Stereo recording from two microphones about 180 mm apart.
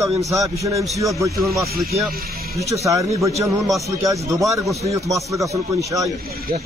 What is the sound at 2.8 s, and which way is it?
Speech, 15° right (ahead or behind).